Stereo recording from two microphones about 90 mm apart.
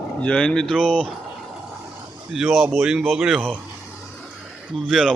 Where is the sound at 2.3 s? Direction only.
Centre (ahead or behind).